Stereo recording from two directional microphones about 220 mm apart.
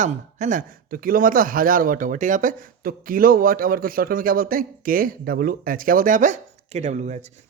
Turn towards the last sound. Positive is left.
turn(degrees=-30)  # may be behind; listen again after turning